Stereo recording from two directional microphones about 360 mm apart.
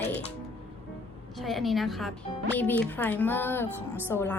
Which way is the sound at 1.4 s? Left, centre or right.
Centre.